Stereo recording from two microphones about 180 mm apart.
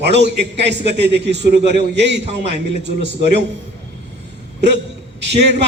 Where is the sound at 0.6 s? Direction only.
70° right (ahead or behind).